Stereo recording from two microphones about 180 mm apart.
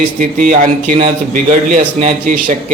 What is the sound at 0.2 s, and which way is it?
A man's voice, 45° right (ahead or behind).